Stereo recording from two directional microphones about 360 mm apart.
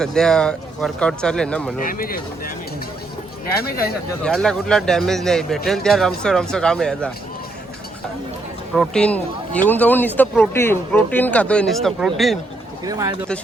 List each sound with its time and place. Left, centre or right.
0.0 s a man's voice: centre
1.8 s speech: left
3.6 s speech: left
4.2 s a man's voice: centre
8.7 s a man's voice: centre